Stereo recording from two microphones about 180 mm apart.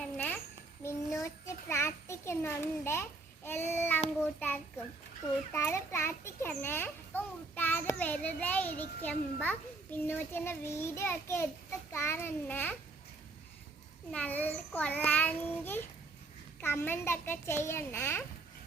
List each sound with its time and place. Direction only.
1.2 s a child's voice: 15° left (ahead or behind)
14.1 s a child's voice: 10° left (ahead or behind)